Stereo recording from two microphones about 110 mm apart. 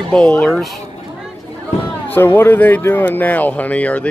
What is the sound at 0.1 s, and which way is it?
Speech, 10° left (ahead or behind).